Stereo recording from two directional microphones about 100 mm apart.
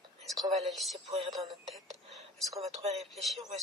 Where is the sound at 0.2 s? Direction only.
Centre (ahead or behind).